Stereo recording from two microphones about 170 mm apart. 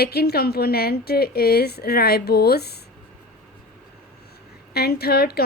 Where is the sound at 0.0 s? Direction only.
65° left (ahead or behind).